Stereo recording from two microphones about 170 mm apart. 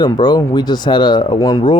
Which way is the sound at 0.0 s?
25° left (ahead or behind).